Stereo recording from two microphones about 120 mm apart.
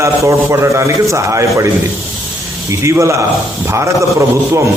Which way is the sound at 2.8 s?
25° right (ahead or behind).